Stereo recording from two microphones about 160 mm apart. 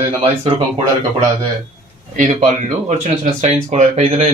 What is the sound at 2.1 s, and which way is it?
Speech, 50° right (ahead or behind).